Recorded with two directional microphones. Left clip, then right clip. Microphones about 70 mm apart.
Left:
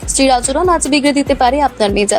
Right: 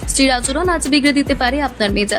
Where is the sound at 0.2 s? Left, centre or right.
Left.